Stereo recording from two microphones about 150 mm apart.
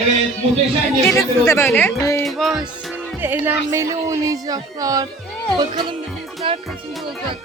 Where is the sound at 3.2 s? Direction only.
15° right (ahead or behind).